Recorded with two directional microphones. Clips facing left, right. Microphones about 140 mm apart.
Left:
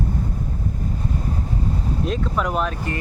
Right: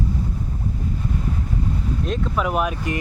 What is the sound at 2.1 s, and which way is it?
Speech, 5° right (ahead or behind).